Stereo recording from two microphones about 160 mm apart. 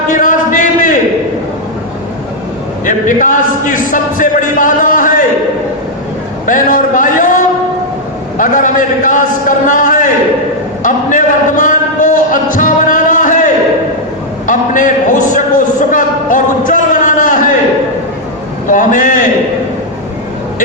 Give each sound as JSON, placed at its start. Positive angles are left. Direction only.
{"t": 0.1, "sound": "a sound", "side_deg": 55}
{"t": 2.8, "sound": "a man's voice", "side_deg": 55}
{"t": 6.4, "sound": "a man's voice", "side_deg": 55}
{"t": 8.4, "sound": "a man's voice", "side_deg": 55}
{"t": 18.7, "sound": "a man's voice", "side_deg": 55}